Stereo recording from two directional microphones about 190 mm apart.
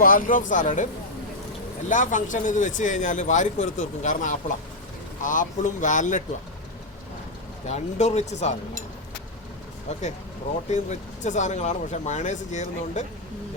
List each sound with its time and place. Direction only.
0.0 s speech: 45° left (ahead or behind)
1.9 s speech: 40° left (ahead or behind)
7.7 s speech: 35° left (ahead or behind)
10.7 s speech: 40° left (ahead or behind)